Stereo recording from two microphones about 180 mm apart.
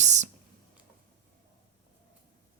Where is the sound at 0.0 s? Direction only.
40° right (ahead or behind).